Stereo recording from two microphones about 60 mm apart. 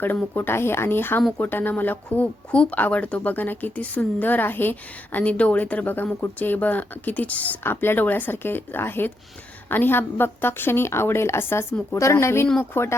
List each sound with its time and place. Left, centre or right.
0.3 s a woman's voice: left
7.6 s a woman's voice: left
11.9 s a woman's voice: left